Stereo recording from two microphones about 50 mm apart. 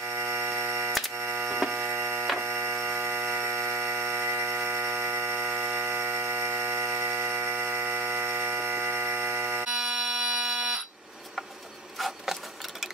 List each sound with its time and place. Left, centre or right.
0.2 s tick-tock: right
1.3 s hum: right
2.4 s a sound: right
9.7 s fire alarm: centre
12.0 s sewing machine: centre